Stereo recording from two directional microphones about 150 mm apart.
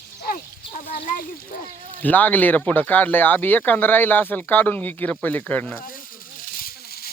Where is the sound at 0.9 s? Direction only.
70° left (ahead or behind).